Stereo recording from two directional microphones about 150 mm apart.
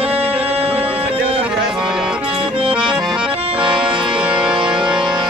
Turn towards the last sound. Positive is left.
turn(degrees=-5)  # may be behind; listen again after turning